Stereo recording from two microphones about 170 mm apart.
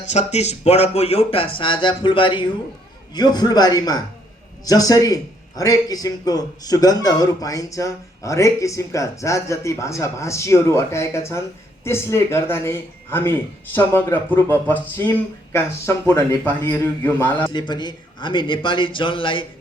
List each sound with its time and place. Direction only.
0.1 s a man's voice: 40° left (ahead or behind); by 17.5 s 10° left (ahead or behind)
17.5 s speech: 25° left (ahead or behind)